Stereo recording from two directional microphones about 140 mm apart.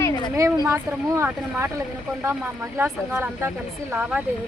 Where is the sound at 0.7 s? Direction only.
20° right (ahead or behind).